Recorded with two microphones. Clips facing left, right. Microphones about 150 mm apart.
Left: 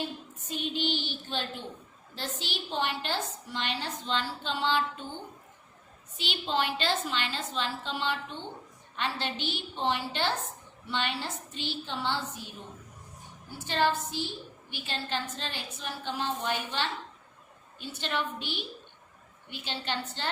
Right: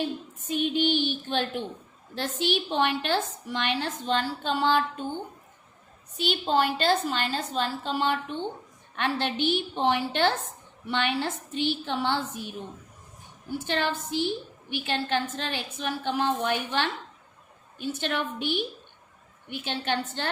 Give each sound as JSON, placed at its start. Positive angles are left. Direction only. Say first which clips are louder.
{"t": 0.5, "sound": "a woman's voice", "louder": "right 7 dB", "side_deg": -60}
{"t": 6.1, "sound": "a woman's voice", "louder": "right 6 dB", "side_deg": -45}
{"t": 13.7, "sound": "a woman's voice", "louder": "left 1 dB", "side_deg": -60}